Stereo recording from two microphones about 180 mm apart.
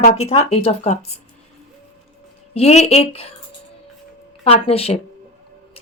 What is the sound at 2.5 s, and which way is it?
Speech, 40° left (ahead or behind).